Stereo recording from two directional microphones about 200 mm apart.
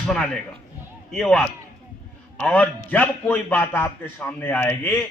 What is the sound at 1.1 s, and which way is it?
Speech, 5° left (ahead or behind).